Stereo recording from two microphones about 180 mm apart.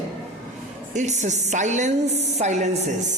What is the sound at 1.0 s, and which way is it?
A woman's voice, 40° right (ahead or behind).